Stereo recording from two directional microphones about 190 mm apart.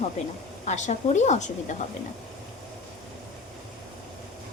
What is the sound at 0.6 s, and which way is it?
Speech, 40° left (ahead or behind).